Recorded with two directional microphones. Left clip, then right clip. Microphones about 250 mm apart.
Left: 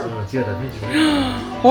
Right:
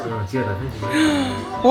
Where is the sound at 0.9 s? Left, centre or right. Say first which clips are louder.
Left 1 dB; centre.